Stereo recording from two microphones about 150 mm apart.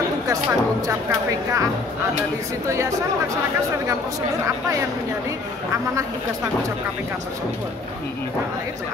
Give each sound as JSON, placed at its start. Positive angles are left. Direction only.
{"t": 0.3, "sound": "speech", "side_deg": -20}